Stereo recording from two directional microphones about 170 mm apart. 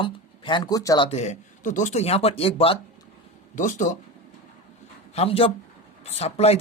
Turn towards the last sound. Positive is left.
turn(degrees=40)  # may be behind; listen again after turning